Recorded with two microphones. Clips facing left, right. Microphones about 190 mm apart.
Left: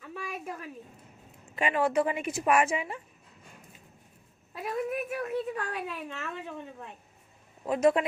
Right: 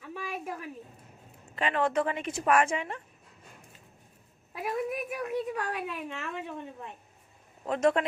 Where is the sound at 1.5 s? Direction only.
10° left (ahead or behind).